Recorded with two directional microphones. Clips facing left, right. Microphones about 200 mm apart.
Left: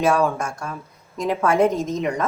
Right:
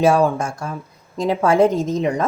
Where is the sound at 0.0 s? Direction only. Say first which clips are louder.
Right 4 dB; 30° right (ahead or behind).